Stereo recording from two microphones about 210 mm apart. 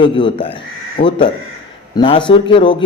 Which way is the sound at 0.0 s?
25° left (ahead or behind).